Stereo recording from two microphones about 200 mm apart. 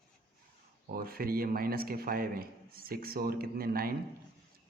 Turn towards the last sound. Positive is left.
turn(degrees=-50)  # may be behind; listen again after turning